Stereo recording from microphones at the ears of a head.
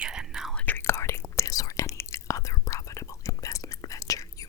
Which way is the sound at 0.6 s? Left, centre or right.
Left.